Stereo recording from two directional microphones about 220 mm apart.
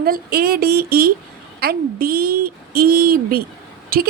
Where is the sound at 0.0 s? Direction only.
45° right (ahead or behind).